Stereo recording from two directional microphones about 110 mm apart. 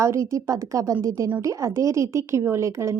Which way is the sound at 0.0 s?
25° right (ahead or behind).